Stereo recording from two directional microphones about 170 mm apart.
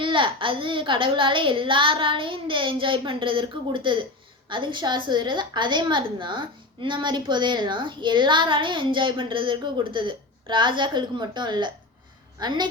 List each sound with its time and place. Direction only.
0.0 s a woman's voice: 30° right (ahead or behind)